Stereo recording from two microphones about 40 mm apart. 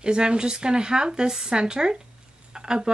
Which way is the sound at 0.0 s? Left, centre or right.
Right.